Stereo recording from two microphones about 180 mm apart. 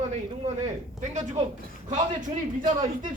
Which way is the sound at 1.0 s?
40° right (ahead or behind).